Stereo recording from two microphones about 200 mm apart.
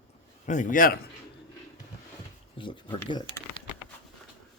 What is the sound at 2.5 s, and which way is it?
Speech, 25° left (ahead or behind).